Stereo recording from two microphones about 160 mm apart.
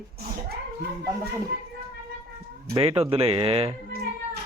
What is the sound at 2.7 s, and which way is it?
Speech, 35° right (ahead or behind).